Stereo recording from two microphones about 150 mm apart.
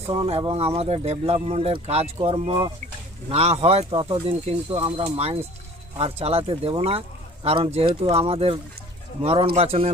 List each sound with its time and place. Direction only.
0.1 s speech: 40° right (ahead or behind)
3.2 s speech: 45° right (ahead or behind)